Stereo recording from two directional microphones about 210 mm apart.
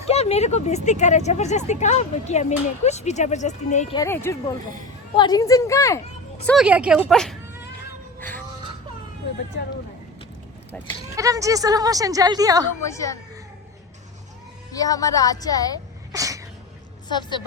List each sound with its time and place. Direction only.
0.1 s speech: 30° left (ahead or behind)
3.9 s a woman's voice: 15° left (ahead or behind)
6.4 s a woman's voice: centre (ahead or behind)
8.2 s music: 10° left (ahead or behind)
11.2 s speech: 15° right (ahead or behind)
12.8 s a woman's voice: 15° left (ahead or behind)
14.7 s a woman's voice: 15° left (ahead or behind)
16.1 s sneeze: 15° right (ahead or behind)
17.1 s a woman's voice: 20° left (ahead or behind)